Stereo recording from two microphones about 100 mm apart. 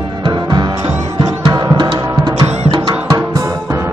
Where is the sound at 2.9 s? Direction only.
40° right (ahead or behind).